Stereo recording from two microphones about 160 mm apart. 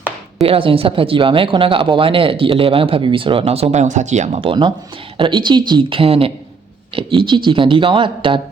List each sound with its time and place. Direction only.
0.4 s speech: 35° right (ahead or behind)